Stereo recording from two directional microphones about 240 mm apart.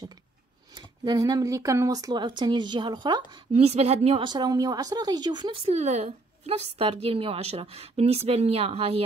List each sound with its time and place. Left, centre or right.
0.7 s speech: centre